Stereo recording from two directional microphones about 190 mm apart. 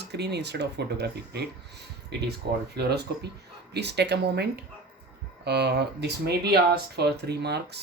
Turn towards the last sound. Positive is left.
turn(degrees=-60)  # may be behind; listen again after turning